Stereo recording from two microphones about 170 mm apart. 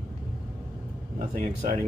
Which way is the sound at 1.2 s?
45° right (ahead or behind).